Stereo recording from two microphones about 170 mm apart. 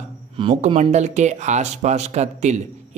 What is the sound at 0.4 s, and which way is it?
A man's voice, 35° right (ahead or behind).